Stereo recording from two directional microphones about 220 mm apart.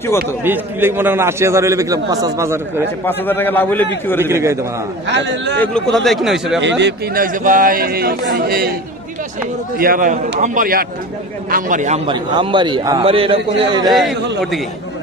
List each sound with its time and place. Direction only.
0.4 s a man's voice: 10° right (ahead or behind)
3.1 s a man's voice: 10° left (ahead or behind)
4.2 s a man's voice: 10° right (ahead or behind)
5.0 s speech: 55° right (ahead or behind)
5.6 s a man's voice: centre (ahead or behind)
6.6 s speech: 45° right (ahead or behind)
9.8 s a man's voice: 40° right (ahead or behind)
12.1 s a man's voice: 20° right (ahead or behind)
13.8 s a man's voice: centre (ahead or behind)